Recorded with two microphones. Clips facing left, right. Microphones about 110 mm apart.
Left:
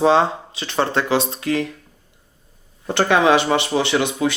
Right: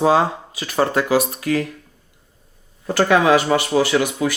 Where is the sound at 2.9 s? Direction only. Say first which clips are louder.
Right 1 dB; 25° left (ahead or behind).